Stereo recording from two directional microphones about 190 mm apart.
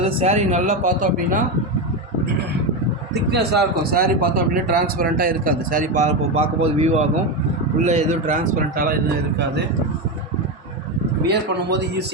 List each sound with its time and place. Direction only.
0.0 s speech: 30° right (ahead or behind)
3.2 s speech: 60° right (ahead or behind)
11.3 s a man's voice: 60° right (ahead or behind)